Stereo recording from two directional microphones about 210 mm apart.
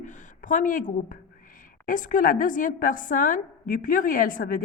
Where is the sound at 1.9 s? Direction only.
40° left (ahead or behind).